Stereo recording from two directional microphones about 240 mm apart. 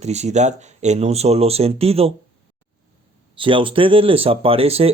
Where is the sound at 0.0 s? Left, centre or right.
Right.